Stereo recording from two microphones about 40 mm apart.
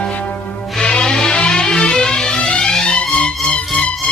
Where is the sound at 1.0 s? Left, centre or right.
Centre.